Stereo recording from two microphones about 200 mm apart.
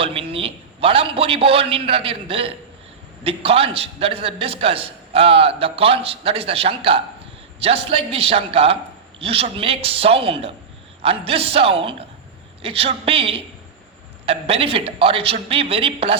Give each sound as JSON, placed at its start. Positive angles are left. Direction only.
{"t": 0.0, "sound": "a man's voice", "side_deg": -30}